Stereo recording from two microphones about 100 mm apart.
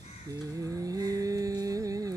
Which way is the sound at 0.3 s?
35° right (ahead or behind).